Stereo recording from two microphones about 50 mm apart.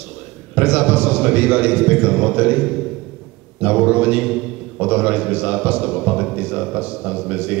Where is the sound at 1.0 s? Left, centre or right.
Centre.